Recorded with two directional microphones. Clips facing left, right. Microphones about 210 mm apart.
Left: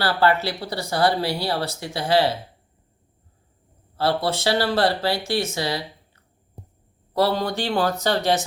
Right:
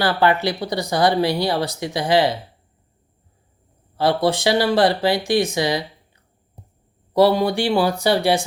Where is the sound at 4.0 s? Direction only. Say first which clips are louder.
Right 4 dB; 15° right (ahead or behind).